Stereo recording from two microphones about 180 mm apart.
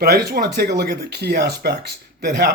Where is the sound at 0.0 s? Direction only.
60° right (ahead or behind).